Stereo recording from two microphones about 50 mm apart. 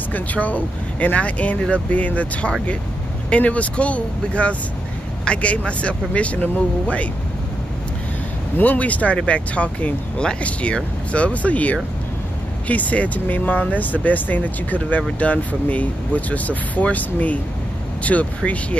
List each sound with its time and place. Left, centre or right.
0.1 s speech: left
8.5 s speech: left